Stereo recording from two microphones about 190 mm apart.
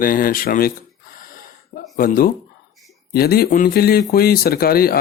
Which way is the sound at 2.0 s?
50° left (ahead or behind).